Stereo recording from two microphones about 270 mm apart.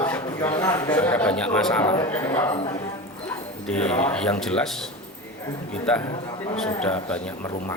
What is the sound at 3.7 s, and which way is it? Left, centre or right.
Speech, centre.